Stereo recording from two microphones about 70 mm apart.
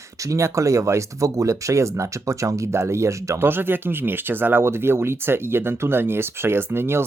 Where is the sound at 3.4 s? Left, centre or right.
Right.